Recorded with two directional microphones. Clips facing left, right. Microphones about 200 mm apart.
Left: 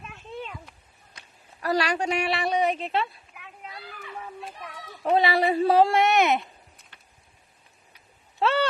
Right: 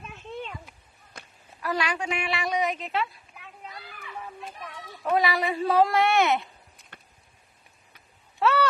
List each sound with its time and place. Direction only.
0.0 s a sound: centre (ahead or behind)
1.6 s a woman's voice: 40° left (ahead or behind)
3.7 s children playing: 30° left (ahead or behind)
5.0 s speech: 30° left (ahead or behind)
6.9 s a sound: 50° right (ahead or behind)
8.4 s duck: 25° left (ahead or behind)